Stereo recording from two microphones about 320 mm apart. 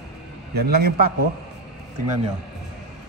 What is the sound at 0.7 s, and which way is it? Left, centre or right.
Speech, right.